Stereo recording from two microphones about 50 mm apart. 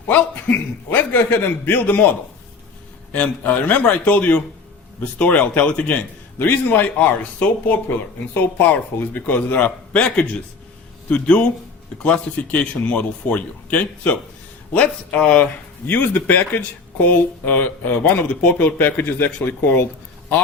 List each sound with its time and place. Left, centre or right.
0.1 s a man's voice: left
6.0 s a man's voice: left
18.2 s a man's voice: left